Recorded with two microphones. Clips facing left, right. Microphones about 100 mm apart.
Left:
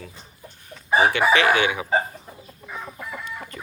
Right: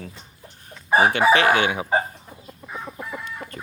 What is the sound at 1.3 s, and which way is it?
Chicken, 45° right (ahead or behind).